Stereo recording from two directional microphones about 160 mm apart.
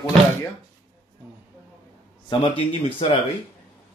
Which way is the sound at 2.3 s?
30° left (ahead or behind).